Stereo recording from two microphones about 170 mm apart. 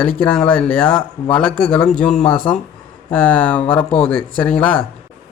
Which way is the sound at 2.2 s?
30° left (ahead or behind).